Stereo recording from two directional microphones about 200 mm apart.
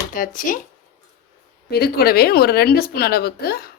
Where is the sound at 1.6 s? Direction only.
50° left (ahead or behind).